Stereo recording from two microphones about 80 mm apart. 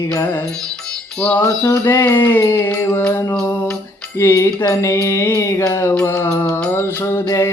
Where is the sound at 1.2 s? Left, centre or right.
Centre.